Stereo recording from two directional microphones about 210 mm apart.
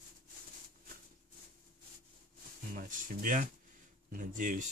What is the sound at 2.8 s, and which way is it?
A man's voice, 40° right (ahead or behind).